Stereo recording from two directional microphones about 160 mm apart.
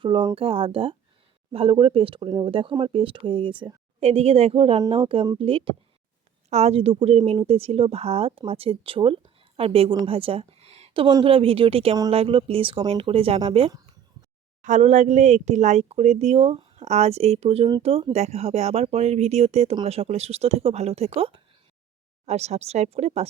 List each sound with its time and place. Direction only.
0.0 s a woman's voice: 30° right (ahead or behind)
14.6 s speech: 50° right (ahead or behind)